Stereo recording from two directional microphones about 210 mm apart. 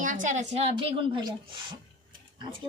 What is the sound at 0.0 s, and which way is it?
A woman's voice, 35° right (ahead or behind).